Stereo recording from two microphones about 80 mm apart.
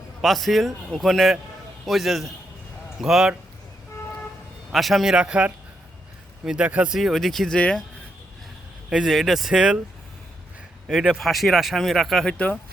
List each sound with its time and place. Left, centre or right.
0.2 s a man's voice: centre
4.7 s a man's voice: centre
6.9 s speech: centre
8.9 s speech: centre
10.8 s speech: centre
12.3 s speech: centre